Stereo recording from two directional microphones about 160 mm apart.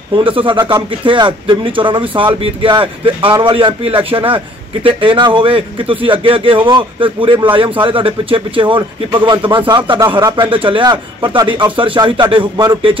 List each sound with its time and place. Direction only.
0.1 s speech: 30° right (ahead or behind)